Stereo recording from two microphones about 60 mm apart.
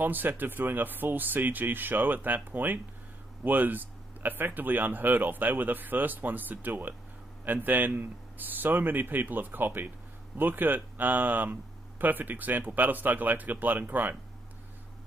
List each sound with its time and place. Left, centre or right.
0.0 s speech: right